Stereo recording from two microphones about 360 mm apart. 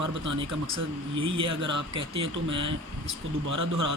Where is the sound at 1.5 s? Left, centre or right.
Right.